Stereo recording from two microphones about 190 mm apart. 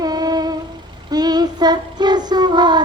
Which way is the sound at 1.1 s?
20° right (ahead or behind).